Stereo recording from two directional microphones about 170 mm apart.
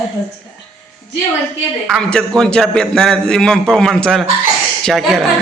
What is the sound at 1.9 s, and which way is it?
A man's voice, 5° left (ahead or behind).